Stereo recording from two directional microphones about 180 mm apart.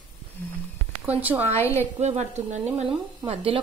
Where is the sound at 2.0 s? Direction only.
40° right (ahead or behind).